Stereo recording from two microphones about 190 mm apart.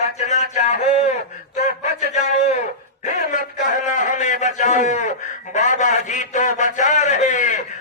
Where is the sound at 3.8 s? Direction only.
40° left (ahead or behind).